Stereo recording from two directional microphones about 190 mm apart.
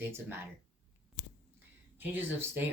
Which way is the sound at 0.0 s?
10° right (ahead or behind).